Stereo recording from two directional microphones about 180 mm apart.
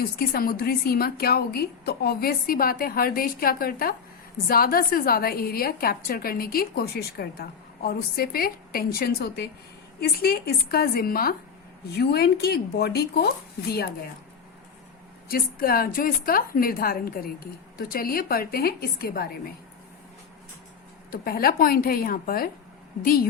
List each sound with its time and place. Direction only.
0.0 s a woman's voice: 55° left (ahead or behind)
15.3 s a woman's voice: 55° left (ahead or behind)
21.1 s a woman's voice: 55° left (ahead or behind)